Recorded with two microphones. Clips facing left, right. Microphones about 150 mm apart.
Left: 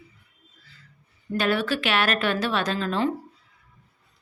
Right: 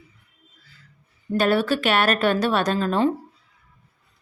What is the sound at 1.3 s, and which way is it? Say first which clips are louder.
A woman's voice: right 4 dB; 40° right (ahead or behind).